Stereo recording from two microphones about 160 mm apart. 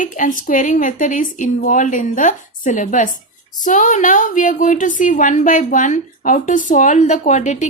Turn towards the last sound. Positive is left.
turn(degrees=50)  # may be behind; listen again after turning